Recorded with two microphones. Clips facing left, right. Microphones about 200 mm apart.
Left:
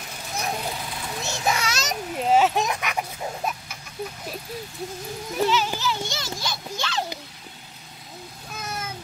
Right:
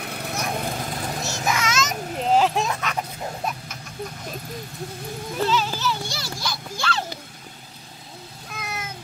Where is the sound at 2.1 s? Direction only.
5° left (ahead or behind).